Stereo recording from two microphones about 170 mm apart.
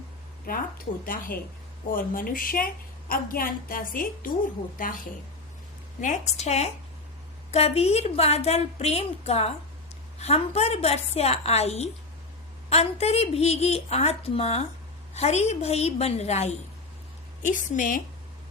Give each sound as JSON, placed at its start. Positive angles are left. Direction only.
{"t": 1.0, "sound": "a woman's voice", "side_deg": 55}
{"t": 6.0, "sound": "a woman's voice", "side_deg": 45}